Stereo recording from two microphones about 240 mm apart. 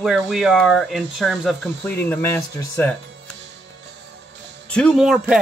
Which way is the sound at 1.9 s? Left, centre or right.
Centre.